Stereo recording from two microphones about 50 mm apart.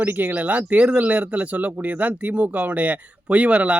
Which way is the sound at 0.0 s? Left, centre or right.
Right.